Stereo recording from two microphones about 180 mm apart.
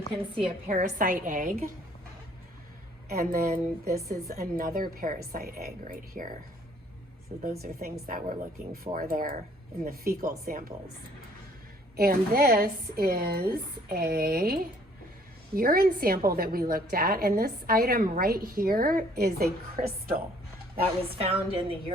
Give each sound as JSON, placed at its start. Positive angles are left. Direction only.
{"t": 0.7, "sound": "a woman's voice", "side_deg": -45}
{"t": 3.1, "sound": "a woman's voice", "side_deg": -55}
{"t": 7.6, "sound": "a woman's voice", "side_deg": -55}
{"t": 11.9, "sound": "a woman's voice", "side_deg": -55}
{"t": 21.2, "sound": "a woman's voice", "side_deg": -30}